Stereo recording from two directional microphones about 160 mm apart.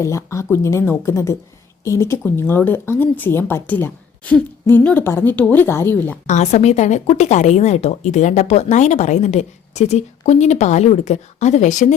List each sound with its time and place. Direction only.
0.0 s speech: 20° left (ahead or behind)
6.2 s speech: 45° left (ahead or behind)